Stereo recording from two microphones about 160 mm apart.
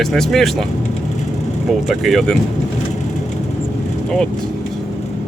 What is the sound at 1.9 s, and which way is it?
Speech, centre (ahead or behind).